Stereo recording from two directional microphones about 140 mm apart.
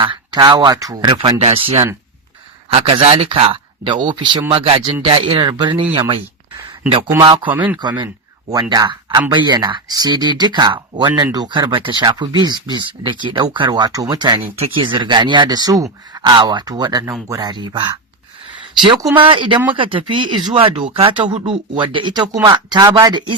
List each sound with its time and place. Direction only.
0.0 s speech: 35° right (ahead or behind)
1.4 s speech: 45° right (ahead or behind)
7.4 s speech: 10° right (ahead or behind)
7.8 s speech: 30° right (ahead or behind)
19.1 s speech: 35° right (ahead or behind); by 23.1 s 20° right (ahead or behind)